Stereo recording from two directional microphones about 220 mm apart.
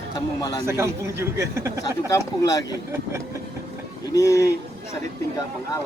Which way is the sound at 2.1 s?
15° left (ahead or behind).